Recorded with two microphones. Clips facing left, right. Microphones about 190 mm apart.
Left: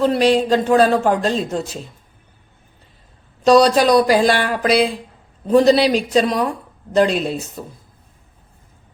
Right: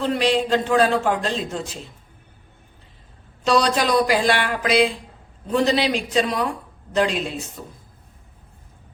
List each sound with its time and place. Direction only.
0.0 s a man's voice: 40° left (ahead or behind)
3.4 s a man's voice: 40° left (ahead or behind)